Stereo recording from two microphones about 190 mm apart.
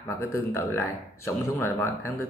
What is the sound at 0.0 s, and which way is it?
Speech, 15° left (ahead or behind).